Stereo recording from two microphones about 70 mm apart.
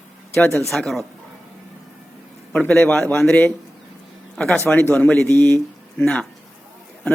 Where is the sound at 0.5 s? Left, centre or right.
Centre.